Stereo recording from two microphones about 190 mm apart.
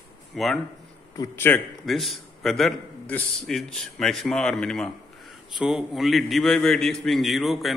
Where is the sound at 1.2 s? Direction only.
10° left (ahead or behind).